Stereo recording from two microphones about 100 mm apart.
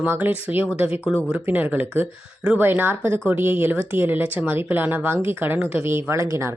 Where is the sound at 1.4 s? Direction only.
20° right (ahead or behind).